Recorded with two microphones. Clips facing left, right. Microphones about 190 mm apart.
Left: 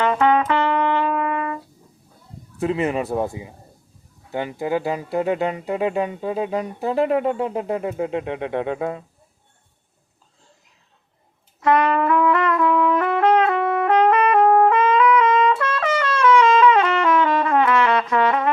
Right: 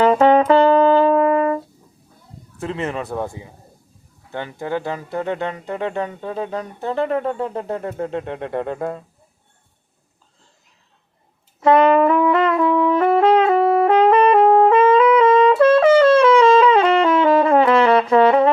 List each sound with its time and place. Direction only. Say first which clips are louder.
0.0 s brass instrument: right 5 dB; 35° right (ahead or behind)
2.6 s speech: left 4 dB; 15° left (ahead or behind)
11.6 s music: right 5 dB; 25° right (ahead or behind)